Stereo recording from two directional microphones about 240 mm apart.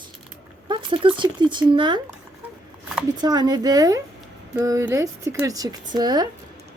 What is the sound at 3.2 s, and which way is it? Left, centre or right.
Speech, centre.